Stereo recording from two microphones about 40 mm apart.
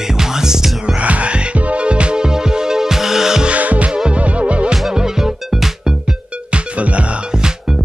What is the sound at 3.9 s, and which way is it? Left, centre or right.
Music, right.